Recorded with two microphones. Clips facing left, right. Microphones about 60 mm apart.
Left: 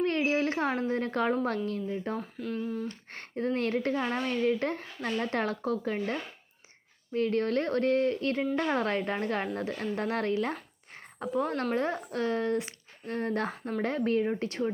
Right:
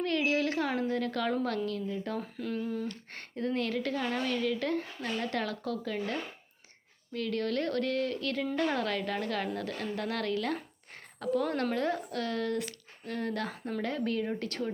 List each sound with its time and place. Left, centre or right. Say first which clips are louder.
0.0 s a sound: left 2 dB; left
0.7 s a woman's voice: left 1 dB; left
2.2 s humming: left 1 dB; centre
2.9 s a woman's voice: left 4 dB; left
14.3 s speech: left 4 dB; left